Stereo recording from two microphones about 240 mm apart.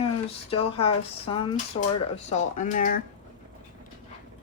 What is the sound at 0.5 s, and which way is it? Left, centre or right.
Speech, left.